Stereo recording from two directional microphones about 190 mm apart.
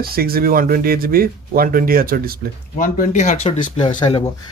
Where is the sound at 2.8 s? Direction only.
45° left (ahead or behind).